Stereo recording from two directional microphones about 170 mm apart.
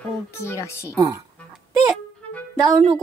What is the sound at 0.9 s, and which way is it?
Speech, 20° right (ahead or behind).